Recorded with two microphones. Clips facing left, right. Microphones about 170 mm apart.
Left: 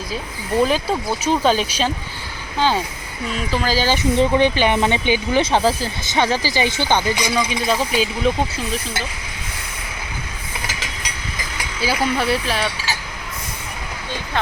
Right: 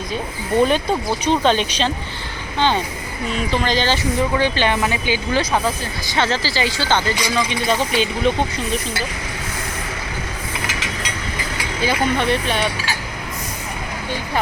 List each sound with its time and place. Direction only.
1.2 s speech: 5° left (ahead or behind)
3.9 s speech: 25° left (ahead or behind)
6.1 s speech: 15° left (ahead or behind)
11.8 s speech: 5° left (ahead or behind)